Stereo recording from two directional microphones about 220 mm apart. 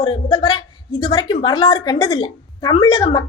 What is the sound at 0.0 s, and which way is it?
A woman's voice, 20° left (ahead or behind).